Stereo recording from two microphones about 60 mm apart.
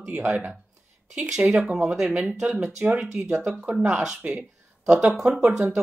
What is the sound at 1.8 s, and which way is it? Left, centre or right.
Speech, centre.